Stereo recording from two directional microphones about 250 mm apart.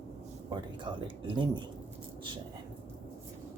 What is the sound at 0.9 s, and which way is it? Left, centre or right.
Speech, centre.